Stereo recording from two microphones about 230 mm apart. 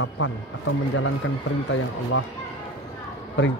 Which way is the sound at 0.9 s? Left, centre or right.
Left.